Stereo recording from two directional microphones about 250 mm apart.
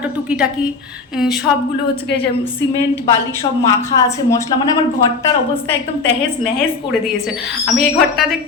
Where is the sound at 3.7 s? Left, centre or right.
Centre.